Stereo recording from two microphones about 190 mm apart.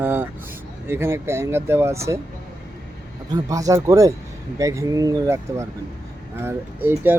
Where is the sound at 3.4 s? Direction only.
15° right (ahead or behind).